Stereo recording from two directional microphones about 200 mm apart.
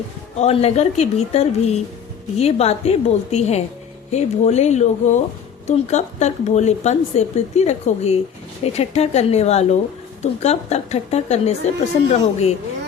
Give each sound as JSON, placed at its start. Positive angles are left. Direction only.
{"t": 0.3, "sound": "speech", "side_deg": 30}